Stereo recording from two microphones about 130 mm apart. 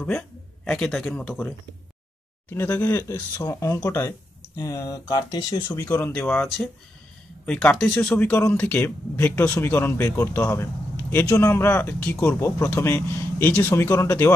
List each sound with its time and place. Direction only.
0.7 s speech: 5° left (ahead or behind)
2.5 s speech: 15° left (ahead or behind)
7.4 s speech: 5° left (ahead or behind)
8.3 s a man's voice: 20° left (ahead or behind)